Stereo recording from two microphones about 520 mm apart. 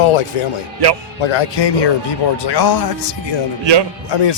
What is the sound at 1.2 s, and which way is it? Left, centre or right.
Speech, left.